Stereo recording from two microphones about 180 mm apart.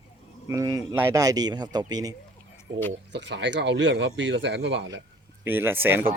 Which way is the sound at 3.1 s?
75° right (ahead or behind).